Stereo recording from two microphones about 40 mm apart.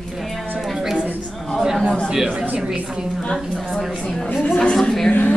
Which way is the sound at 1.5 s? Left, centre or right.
Centre.